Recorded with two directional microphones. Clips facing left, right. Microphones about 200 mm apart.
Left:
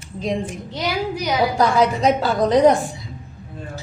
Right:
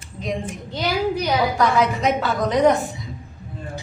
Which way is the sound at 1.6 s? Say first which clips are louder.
Left 2 dB; 35° left (ahead or behind).